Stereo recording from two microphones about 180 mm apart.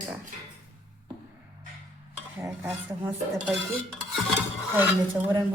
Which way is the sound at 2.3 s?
10° right (ahead or behind).